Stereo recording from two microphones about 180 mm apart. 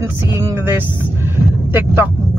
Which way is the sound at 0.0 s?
15° right (ahead or behind).